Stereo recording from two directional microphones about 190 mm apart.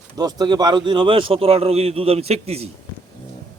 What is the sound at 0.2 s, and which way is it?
Speech, 20° right (ahead or behind).